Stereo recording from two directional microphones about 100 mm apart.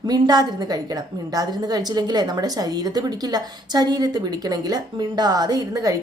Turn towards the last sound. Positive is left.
turn(degrees=-35)  # may be behind; listen again after turning